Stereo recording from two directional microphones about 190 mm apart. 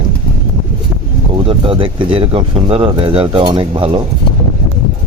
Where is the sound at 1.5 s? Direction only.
25° right (ahead or behind).